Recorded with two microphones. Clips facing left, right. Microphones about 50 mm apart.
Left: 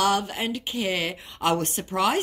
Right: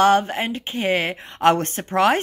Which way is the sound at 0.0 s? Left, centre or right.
Right.